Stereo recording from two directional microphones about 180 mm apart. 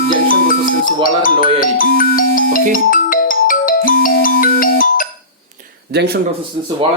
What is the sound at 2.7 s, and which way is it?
Ringtone, 50° left (ahead or behind).